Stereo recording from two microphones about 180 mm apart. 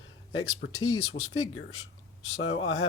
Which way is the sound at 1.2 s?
50° left (ahead or behind).